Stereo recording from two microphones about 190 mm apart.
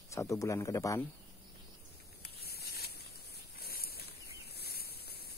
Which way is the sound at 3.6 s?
55° left (ahead or behind).